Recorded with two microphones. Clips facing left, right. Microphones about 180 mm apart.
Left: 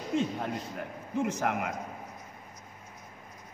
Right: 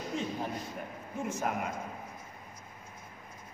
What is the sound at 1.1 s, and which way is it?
Speech, 70° left (ahead or behind).